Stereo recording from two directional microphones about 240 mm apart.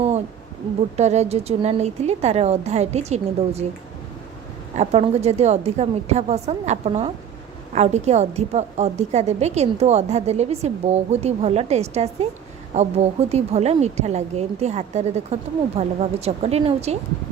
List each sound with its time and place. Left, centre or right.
0.9 s a woman's voice: right
4.8 s a woman's voice: right